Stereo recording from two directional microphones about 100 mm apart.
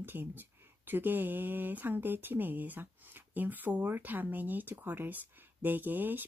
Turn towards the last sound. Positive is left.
turn(degrees=-20)  # may be behind; listen again after turning